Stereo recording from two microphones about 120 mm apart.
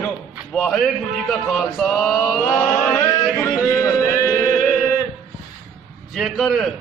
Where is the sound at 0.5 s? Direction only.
Centre (ahead or behind).